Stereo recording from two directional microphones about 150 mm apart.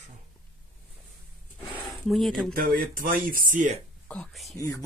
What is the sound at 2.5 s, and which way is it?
Speech, 80° right.